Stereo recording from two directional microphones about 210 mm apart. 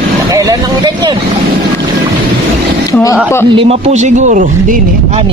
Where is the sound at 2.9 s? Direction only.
15° left (ahead or behind).